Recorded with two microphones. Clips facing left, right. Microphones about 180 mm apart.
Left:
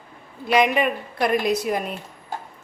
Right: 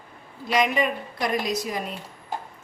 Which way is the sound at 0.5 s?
60° left (ahead or behind).